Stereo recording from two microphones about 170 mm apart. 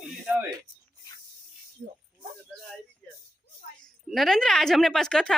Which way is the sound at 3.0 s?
10° left (ahead or behind).